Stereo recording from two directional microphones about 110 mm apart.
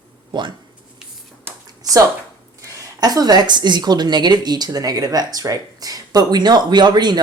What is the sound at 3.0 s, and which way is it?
Speech, 35° right (ahead or behind).